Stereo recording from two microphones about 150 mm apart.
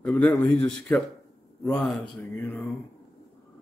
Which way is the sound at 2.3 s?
15° left (ahead or behind).